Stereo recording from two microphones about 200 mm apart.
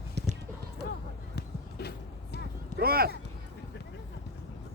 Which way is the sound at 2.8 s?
50° right (ahead or behind).